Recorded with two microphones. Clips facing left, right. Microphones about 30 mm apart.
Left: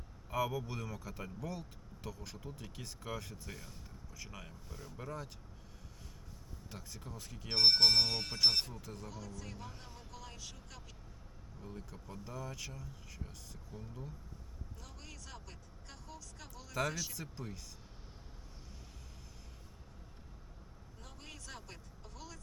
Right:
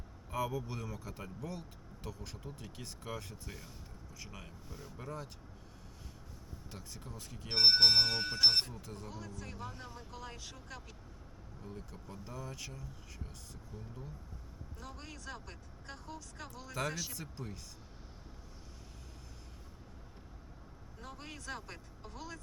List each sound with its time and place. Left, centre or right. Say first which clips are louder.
0.3 s speech: left 1 dB; centre
6.7 s speech: left 1 dB; centre
7.5 s speech: right 2 dB; right
8.6 s speech: right 1 dB; centre
9.7 s speech: right 5 dB; centre
10.1 s speech: right 3 dB; right
11.6 s speech: right 1 dB; centre
14.8 s speech: right 8 dB; centre
16.9 s speech: even; centre
21.0 s speech: right 6 dB; centre